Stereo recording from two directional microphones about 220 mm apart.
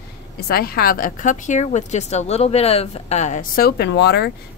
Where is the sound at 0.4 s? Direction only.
45° left (ahead or behind).